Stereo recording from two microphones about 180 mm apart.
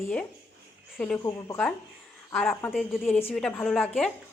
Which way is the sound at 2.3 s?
Centre (ahead or behind).